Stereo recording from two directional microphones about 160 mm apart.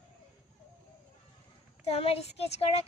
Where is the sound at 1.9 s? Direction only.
40° left (ahead or behind).